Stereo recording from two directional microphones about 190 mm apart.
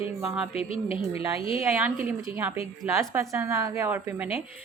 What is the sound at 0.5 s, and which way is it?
A woman's voice, 30° left (ahead or behind).